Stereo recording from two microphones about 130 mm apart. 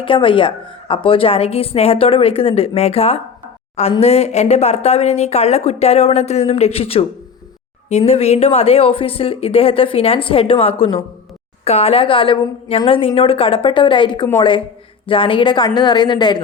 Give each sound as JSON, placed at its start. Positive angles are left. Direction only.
{"t": 0.0, "sound": "a woman's voice", "side_deg": 40}